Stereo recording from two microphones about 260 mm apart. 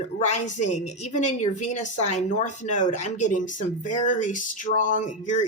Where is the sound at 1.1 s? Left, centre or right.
Left.